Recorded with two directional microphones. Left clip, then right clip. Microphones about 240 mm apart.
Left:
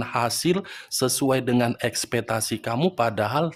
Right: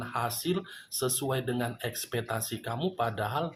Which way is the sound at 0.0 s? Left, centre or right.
Left.